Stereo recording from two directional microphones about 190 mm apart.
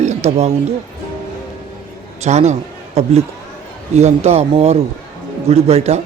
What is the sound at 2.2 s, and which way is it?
A man's voice, 35° right (ahead or behind).